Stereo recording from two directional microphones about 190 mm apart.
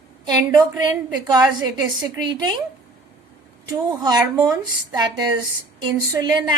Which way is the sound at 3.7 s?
20° right (ahead or behind).